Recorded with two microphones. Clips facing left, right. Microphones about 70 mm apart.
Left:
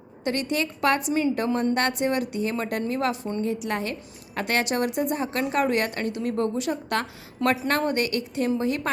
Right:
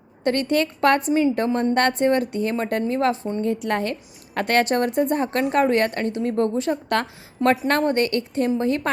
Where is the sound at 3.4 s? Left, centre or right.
Right.